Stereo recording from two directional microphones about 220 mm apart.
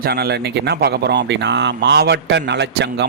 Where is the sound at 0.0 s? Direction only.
45° right (ahead or behind).